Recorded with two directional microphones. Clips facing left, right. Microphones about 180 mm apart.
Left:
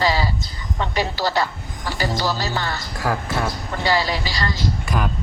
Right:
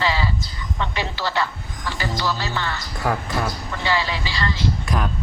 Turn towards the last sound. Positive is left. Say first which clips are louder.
# left 1 dB
turn(degrees=0)  # may be behind; listen again after turning